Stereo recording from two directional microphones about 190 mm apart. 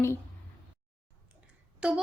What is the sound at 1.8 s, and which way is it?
Speech, 5° right (ahead or behind).